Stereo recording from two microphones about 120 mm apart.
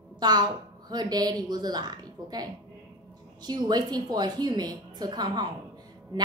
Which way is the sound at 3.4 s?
35° right (ahead or behind).